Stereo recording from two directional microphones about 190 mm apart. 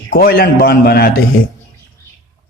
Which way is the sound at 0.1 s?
50° left (ahead or behind).